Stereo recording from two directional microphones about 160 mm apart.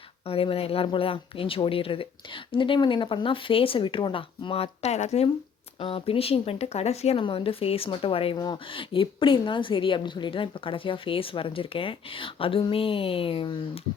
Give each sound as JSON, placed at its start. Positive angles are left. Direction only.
{"t": 0.3, "sound": "speech", "side_deg": 35}